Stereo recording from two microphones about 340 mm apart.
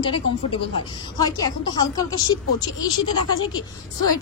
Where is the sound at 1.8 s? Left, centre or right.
Centre.